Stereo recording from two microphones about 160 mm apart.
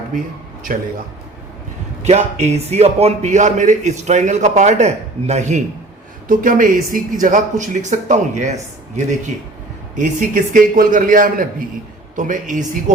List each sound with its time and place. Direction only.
2.0 s a man's voice: 45° right (ahead or behind)
6.2 s a man's voice: 55° right (ahead or behind)
9.9 s a man's voice: 55° right (ahead or behind)